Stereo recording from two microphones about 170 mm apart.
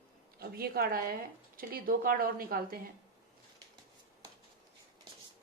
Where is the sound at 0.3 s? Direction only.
65° right (ahead or behind).